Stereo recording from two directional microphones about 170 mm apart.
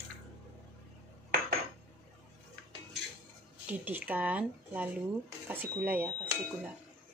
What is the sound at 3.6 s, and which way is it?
Speech, 10° right (ahead or behind).